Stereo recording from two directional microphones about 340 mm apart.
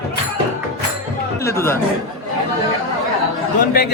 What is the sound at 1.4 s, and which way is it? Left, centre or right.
Speech, centre.